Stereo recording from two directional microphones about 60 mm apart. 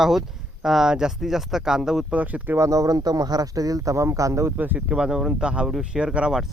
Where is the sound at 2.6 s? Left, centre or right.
Right.